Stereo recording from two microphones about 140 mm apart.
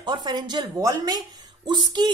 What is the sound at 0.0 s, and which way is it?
A woman's voice, 30° right (ahead or behind).